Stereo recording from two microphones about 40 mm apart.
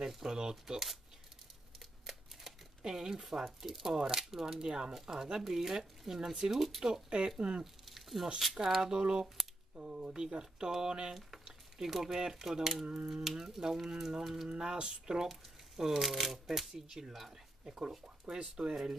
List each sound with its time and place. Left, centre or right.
0.0 s speech: centre
2.8 s speech: centre
6.8 s speech: right
7.6 s squish: centre
8.4 s speech: centre
8.9 s speech: right
12.8 s speech: right
13.1 s speech: centre
14.5 s speech: right
15.2 s speech: centre
18.3 s speech: right